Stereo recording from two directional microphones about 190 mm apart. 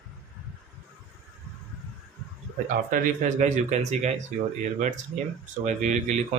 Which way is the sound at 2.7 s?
45° right (ahead or behind).